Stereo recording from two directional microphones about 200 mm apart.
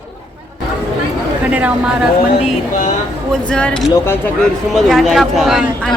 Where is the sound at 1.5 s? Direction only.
5° right (ahead or behind).